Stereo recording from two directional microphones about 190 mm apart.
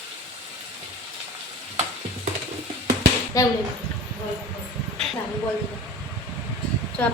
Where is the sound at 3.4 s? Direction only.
20° left (ahead or behind).